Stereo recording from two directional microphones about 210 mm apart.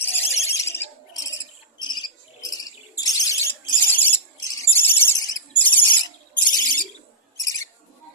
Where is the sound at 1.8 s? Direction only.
20° left (ahead or behind).